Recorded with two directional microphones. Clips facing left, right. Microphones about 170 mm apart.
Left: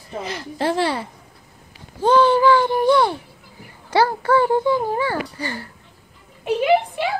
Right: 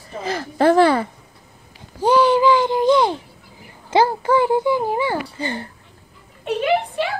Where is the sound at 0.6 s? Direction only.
50° right (ahead or behind).